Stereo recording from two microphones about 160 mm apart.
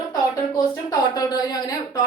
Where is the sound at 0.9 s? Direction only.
25° left (ahead or behind).